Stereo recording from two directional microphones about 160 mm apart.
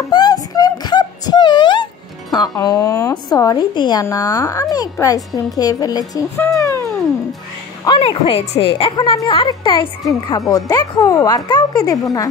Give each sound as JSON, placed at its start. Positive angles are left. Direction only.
{"t": 0.1, "sound": "a sound", "side_deg": 25}
{"t": 2.3, "sound": "a woman's voice", "side_deg": 25}
{"t": 8.3, "sound": "a woman's voice", "side_deg": 40}